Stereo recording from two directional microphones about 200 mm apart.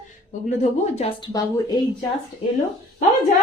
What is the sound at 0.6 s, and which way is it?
Speech, 30° left (ahead or behind).